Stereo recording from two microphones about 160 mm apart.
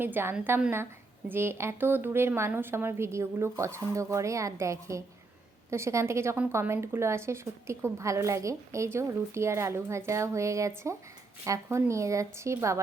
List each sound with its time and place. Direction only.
0.0 s speech: 15° right (ahead or behind)